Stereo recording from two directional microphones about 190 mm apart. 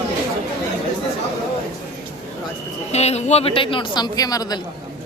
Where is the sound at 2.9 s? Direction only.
35° left (ahead or behind); by 4.6 s 20° left (ahead or behind).